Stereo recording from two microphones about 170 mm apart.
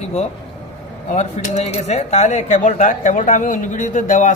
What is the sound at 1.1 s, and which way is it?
A woman's voice, 40° left (ahead or behind).